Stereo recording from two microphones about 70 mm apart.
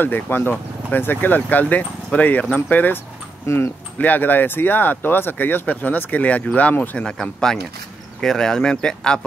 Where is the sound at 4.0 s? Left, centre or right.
Left.